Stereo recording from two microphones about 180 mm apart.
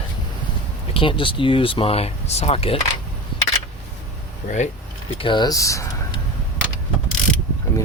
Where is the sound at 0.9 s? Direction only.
30° left (ahead or behind).